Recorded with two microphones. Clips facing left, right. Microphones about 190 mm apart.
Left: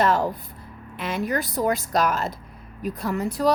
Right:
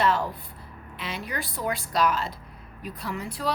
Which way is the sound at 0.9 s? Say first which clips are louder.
Left 8 dB; 50° left (ahead or behind).